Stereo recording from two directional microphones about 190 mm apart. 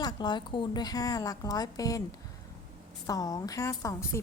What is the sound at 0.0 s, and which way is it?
A woman's voice, 20° left (ahead or behind).